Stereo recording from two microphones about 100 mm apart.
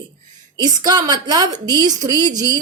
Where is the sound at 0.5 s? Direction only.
45° right (ahead or behind).